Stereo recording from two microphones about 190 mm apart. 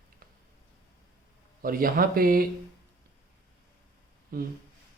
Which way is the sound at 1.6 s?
50° right (ahead or behind).